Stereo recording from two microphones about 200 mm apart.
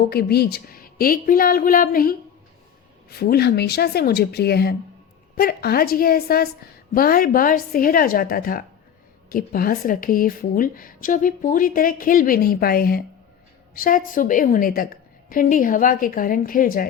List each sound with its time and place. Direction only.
0.1 s a woman's voice: 50° left (ahead or behind)